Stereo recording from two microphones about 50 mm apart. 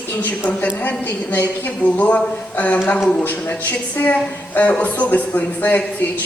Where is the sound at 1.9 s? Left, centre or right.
Left.